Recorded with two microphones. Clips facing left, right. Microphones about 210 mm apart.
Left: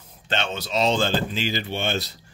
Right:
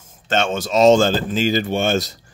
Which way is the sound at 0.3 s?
45° right (ahead or behind).